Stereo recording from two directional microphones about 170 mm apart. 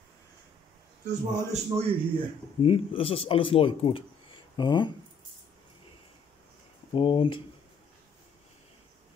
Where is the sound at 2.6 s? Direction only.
35° left (ahead or behind).